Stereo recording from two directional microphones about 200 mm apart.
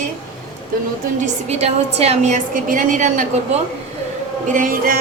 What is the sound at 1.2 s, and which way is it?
A woman's voice, 30° right (ahead or behind).